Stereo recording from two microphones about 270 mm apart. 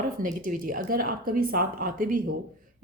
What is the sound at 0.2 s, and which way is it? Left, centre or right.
Speech, right.